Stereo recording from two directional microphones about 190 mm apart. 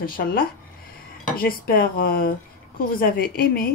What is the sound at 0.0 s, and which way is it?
Speech, 50° left (ahead or behind).